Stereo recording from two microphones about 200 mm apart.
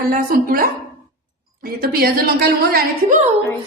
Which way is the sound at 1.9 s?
50° right (ahead or behind).